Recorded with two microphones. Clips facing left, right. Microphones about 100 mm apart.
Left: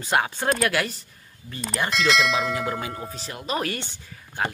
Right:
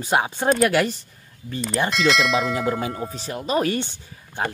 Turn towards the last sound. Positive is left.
turn(degrees=-20)  # may be behind; listen again after turning